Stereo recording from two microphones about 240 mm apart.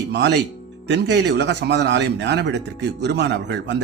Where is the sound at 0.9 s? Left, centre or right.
Right.